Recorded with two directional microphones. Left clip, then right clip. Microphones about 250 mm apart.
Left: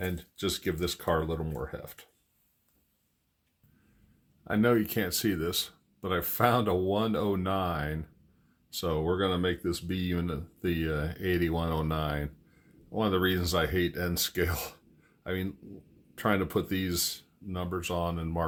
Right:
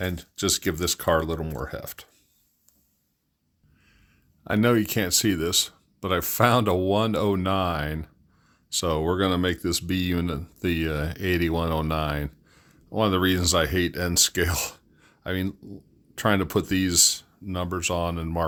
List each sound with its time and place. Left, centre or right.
0.0 s speech: right
4.4 s speech: right